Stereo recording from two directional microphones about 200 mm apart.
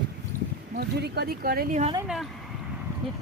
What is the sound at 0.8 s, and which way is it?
Speech, 55° right (ahead or behind).